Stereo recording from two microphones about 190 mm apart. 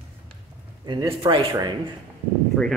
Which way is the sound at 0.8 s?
20° right (ahead or behind).